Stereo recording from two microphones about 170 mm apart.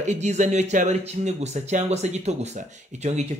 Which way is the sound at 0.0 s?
40° right (ahead or behind).